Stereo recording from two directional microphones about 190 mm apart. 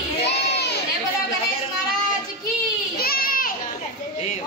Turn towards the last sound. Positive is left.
turn(degrees=50)  # may be behind; listen again after turning